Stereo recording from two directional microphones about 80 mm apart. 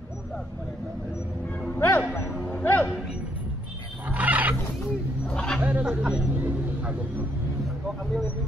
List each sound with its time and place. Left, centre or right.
1.8 s music: left
2.3 s music: centre
4.1 s a sound: centre
5.3 s dog: centre
5.6 s a sound: centre
6.3 s vehicle: right